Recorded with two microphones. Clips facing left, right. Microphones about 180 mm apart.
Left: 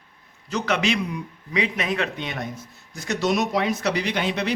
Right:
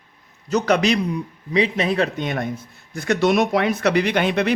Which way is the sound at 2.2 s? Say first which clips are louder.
Right 6 dB; 50° right (ahead or behind).